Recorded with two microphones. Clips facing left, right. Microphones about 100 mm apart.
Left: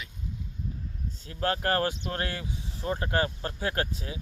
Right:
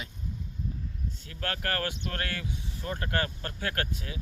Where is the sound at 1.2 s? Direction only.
25° left (ahead or behind).